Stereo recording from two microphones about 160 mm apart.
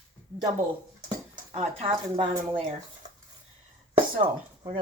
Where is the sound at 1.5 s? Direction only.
35° right (ahead or behind).